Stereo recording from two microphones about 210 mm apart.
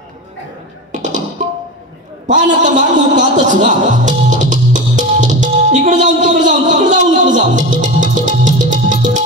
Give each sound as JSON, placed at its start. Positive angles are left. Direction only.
{"t": 2.2, "sound": "music", "side_deg": -35}